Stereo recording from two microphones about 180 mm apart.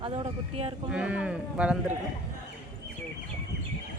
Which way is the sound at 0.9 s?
5° right (ahead or behind).